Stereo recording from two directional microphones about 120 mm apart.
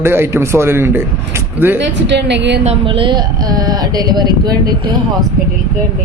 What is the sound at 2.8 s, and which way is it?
Speech, 45° right (ahead or behind).